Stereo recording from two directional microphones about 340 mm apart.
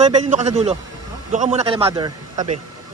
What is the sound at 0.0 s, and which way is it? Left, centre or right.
A man's voice, right.